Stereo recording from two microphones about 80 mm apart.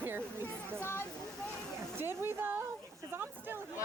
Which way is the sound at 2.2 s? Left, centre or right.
Right.